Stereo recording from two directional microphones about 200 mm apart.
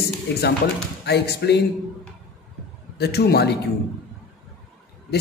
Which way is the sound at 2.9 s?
55° left (ahead or behind).